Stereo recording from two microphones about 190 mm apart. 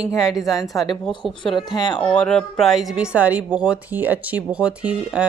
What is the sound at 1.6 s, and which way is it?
Speech, 20° left (ahead or behind).